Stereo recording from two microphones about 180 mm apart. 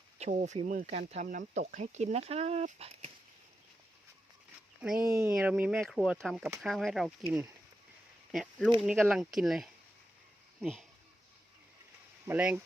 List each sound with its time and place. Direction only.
0.2 s speech: 40° right (ahead or behind)
4.8 s speech: 5° right (ahead or behind)
8.3 s speech: centre (ahead or behind)
12.2 s speech: 10° right (ahead or behind)